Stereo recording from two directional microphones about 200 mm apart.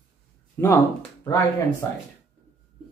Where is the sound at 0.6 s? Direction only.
10° left (ahead or behind).